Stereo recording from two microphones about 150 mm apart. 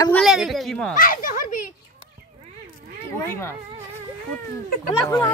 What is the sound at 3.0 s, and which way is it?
Speech, 15° left (ahead or behind).